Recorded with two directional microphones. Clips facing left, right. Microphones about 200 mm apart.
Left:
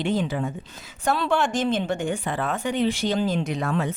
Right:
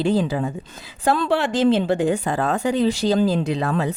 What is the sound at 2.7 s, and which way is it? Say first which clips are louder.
Speech: right 3 dB; 35° right (ahead or behind).